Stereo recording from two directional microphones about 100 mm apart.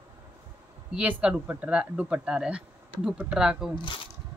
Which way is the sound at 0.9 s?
10° right (ahead or behind).